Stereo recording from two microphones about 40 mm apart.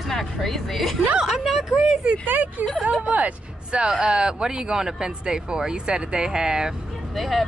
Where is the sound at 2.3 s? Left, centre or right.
Right.